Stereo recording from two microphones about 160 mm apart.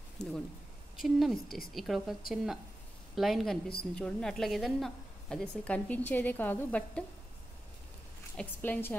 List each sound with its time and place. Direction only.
0.9 s a woman's voice: centre (ahead or behind)
8.4 s a woman's voice: 10° left (ahead or behind)